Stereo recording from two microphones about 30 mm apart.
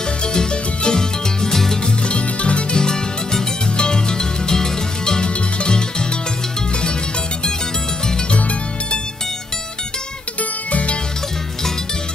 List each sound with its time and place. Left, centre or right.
0.2 s music: left
2.0 s music: left
2.7 s music: left
8.3 s music: left
10.7 s music: left